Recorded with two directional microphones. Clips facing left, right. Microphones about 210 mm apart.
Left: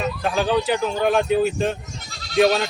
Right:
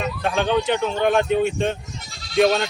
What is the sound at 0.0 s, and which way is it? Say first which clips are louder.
Speech: even; centre (ahead or behind).